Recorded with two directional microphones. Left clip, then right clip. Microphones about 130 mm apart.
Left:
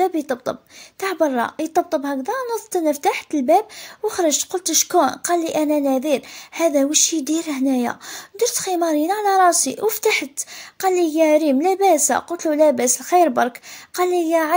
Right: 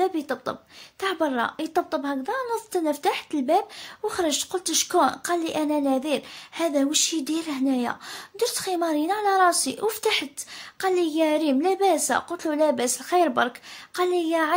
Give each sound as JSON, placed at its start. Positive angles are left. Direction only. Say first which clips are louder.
{"t": 1.0, "sound": "a woman's voice", "louder": "left 5 dB", "side_deg": 30}